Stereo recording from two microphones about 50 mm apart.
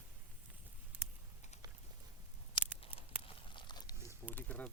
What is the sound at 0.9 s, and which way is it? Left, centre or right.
Typing, right.